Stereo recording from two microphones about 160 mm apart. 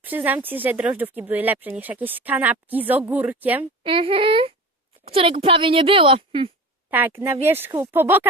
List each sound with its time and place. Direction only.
0.0 s speech: 10° right (ahead or behind)
3.8 s a woman's voice: 35° right (ahead or behind)
7.4 s speech: 15° right (ahead or behind)